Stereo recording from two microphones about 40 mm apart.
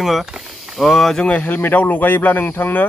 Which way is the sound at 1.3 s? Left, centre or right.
Left.